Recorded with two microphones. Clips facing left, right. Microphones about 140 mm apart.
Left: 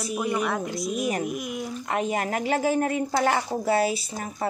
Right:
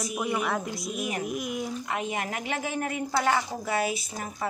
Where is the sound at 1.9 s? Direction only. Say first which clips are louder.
Left 5 dB; 40° left (ahead or behind).